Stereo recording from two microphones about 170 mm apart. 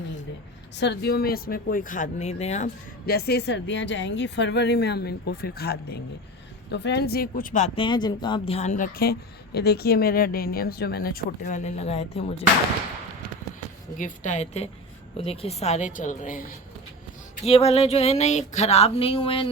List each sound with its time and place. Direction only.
0.8 s speech: 75° left (ahead or behind); by 2.6 s 40° left (ahead or behind)
3.1 s speech: 70° left (ahead or behind)
6.7 s speech: 90° left; by 7.7 s 50° left (ahead or behind)
7.8 s speech: 25° left (ahead or behind)
13.9 s a woman's voice: 45° left (ahead or behind)
17.4 s speech: 40° left (ahead or behind)